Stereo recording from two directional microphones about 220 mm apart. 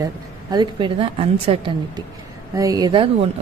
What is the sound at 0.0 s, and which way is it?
Speech, 20° right (ahead or behind).